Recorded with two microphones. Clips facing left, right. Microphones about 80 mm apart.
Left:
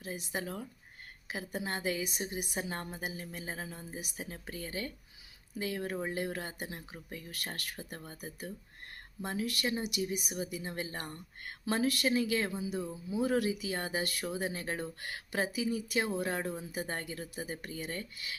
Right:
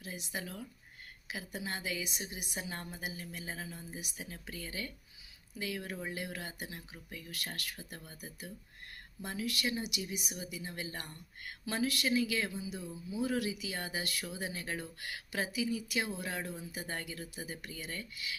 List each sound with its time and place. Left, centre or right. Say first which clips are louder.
0.0 s speech: left 4 dB; left